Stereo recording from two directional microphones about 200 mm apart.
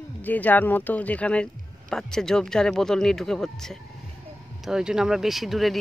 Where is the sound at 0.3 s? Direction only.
10° left (ahead or behind).